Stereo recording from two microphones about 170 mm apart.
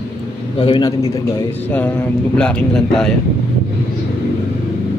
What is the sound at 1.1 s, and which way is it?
A man's voice, 15° left (ahead or behind).